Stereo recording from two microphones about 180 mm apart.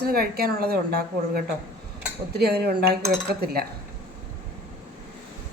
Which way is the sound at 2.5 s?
60° right (ahead or behind).